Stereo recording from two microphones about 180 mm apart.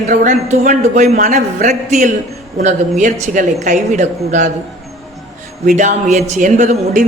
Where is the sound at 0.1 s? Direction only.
45° right (ahead or behind).